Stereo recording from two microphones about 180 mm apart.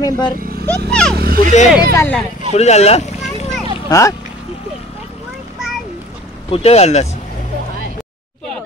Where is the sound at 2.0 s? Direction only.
10° left (ahead or behind).